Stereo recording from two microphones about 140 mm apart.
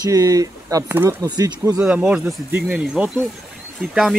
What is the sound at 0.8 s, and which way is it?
Speech, 15° right (ahead or behind).